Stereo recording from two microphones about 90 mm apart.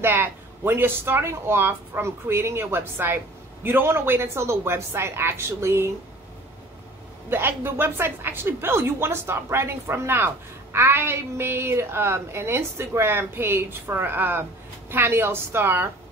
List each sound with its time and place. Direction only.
0.0 s a woman's voice: 25° right (ahead or behind)
7.2 s a woman's voice: 25° right (ahead or behind)